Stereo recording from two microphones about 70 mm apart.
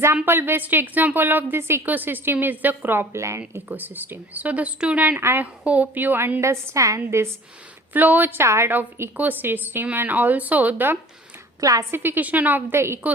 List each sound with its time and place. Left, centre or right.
0.3 s a woman's voice: right
1.8 s a woman's voice: right
3.2 s speech: right
3.7 s a woman's voice: right
5.6 s a woman's voice: right
7.9 s a woman's voice: right
8.4 s a woman's voice: right
9.1 s a woman's voice: right
11.6 s a woman's voice: right
11.9 s a woman's voice: right